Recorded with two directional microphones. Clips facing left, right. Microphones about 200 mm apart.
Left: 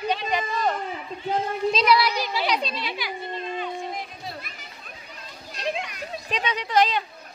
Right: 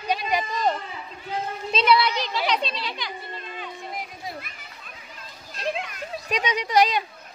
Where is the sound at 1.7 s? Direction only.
Centre (ahead or behind).